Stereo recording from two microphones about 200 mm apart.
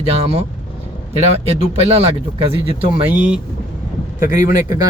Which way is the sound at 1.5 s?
30° right (ahead or behind).